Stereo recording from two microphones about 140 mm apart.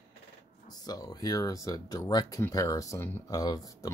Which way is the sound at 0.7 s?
30° left (ahead or behind).